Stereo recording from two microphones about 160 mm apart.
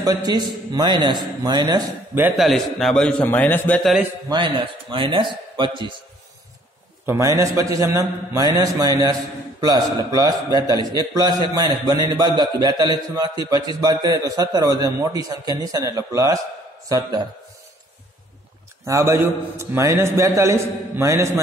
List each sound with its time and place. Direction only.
0.0 s a man's voice: 25° right (ahead or behind)
2.3 s a man's voice: centre (ahead or behind)
4.3 s a man's voice: 30° right (ahead or behind)
7.1 s a man's voice: 20° right (ahead or behind)
18.9 s a man's voice: 20° right (ahead or behind)